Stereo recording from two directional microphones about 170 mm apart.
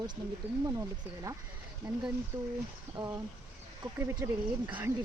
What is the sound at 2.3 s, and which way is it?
Speech, 10° right (ahead or behind).